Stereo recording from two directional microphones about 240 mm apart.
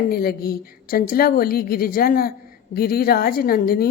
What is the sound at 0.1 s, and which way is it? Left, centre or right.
A woman's voice, left.